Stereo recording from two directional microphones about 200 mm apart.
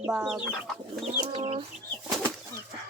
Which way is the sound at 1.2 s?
30° right (ahead or behind).